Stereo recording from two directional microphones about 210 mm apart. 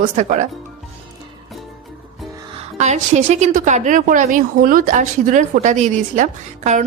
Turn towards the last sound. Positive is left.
turn(degrees=-35)  # may be behind; listen again after turning